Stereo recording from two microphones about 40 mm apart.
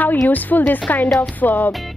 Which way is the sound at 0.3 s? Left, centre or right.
Left.